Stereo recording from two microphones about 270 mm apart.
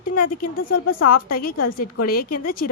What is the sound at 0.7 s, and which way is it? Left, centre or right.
Speech, left.